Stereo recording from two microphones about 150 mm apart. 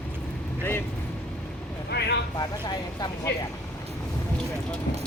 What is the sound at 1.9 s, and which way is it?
Vehicle, 90° left.